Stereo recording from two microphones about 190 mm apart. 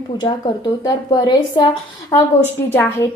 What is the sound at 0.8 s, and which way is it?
Speech, 20° left (ahead or behind).